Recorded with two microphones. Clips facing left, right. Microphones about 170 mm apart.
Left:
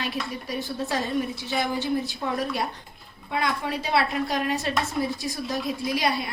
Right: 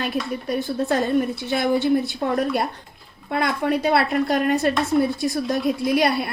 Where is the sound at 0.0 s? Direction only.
55° right (ahead or behind).